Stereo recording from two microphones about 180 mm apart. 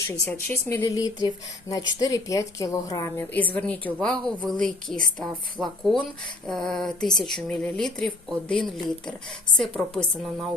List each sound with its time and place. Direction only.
0.1 s a woman's voice: 10° left (ahead or behind)
5.2 s speech: centre (ahead or behind)